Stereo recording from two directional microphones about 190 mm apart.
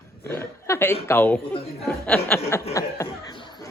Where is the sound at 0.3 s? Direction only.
10° left (ahead or behind).